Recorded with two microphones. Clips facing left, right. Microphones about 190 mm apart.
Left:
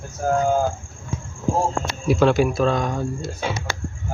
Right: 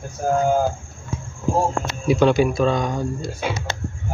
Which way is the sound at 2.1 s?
Centre (ahead or behind).